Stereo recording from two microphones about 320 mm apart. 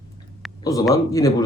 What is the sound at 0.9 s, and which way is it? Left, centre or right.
Speech, centre.